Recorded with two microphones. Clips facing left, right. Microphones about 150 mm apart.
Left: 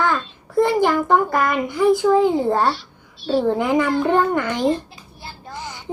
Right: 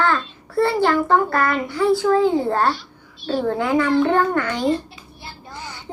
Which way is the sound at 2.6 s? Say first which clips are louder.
Even; centre (ahead or behind).